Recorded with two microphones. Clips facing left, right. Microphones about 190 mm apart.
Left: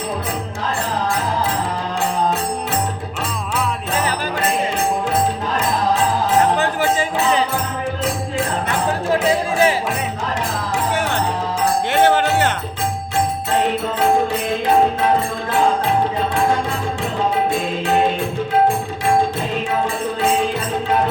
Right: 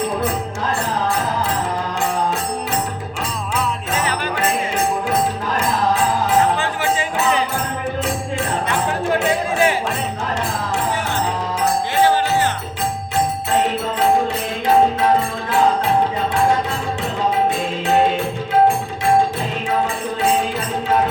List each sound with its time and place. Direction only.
11.9 s music: 65° left (ahead or behind)